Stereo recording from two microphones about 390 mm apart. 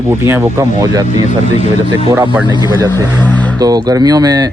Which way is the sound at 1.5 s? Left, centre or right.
Centre.